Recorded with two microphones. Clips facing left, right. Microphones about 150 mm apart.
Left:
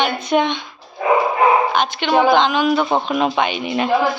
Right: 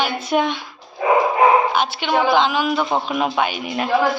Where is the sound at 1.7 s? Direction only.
5° right (ahead or behind).